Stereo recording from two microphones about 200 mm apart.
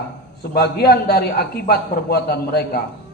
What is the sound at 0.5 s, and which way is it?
A man's voice, 55° left (ahead or behind).